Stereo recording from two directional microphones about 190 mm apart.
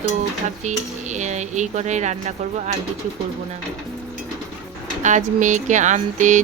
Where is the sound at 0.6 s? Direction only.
40° right (ahead or behind).